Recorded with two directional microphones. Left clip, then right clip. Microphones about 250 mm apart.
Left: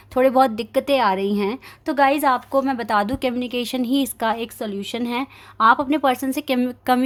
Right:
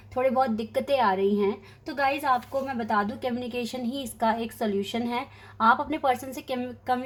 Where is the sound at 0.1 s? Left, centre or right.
Left.